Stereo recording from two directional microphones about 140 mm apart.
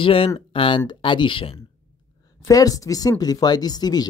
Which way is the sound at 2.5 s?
25° left (ahead or behind).